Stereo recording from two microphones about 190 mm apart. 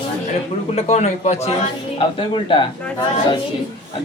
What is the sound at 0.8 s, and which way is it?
Speech, 35° left (ahead or behind).